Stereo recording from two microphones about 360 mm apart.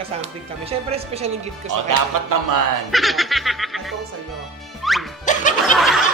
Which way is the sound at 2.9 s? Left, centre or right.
Centre.